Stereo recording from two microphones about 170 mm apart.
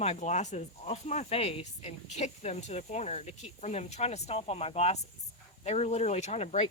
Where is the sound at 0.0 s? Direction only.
40° left (ahead or behind).